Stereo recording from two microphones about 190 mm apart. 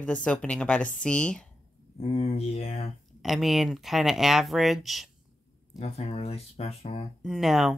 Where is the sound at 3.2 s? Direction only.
Centre (ahead or behind).